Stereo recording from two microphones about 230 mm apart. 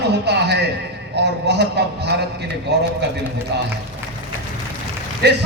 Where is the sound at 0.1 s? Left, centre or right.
Right.